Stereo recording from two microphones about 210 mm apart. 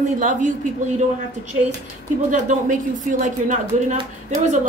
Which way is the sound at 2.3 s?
35° right (ahead or behind).